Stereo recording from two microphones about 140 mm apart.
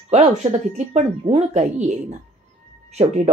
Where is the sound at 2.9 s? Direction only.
60° right (ahead or behind).